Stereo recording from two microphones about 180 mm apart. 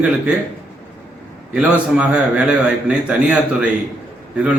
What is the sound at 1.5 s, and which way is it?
A man's voice, 5° right (ahead or behind).